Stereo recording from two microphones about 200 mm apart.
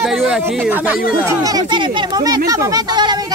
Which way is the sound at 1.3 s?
20° right (ahead or behind).